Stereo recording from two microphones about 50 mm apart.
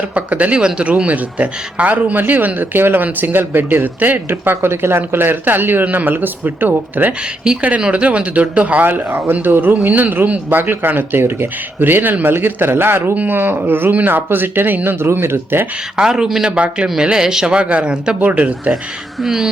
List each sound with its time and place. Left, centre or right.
0.1 s speech: right
4.3 s speech: right
7.8 s speech: right
16.0 s speech: centre
19.2 s speech: centre